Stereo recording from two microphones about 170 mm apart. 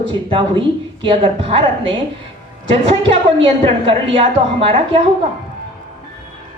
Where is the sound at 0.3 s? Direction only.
30° right (ahead or behind).